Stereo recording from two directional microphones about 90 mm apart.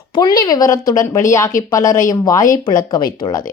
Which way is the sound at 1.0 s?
35° left (ahead or behind).